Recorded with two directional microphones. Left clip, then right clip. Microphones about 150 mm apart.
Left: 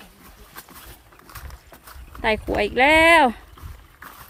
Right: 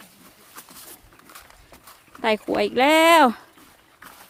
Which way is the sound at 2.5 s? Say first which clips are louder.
Left 2 dB; 40° right (ahead or behind).